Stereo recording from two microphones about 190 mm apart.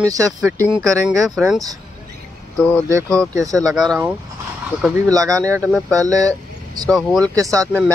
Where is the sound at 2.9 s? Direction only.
15° right (ahead or behind).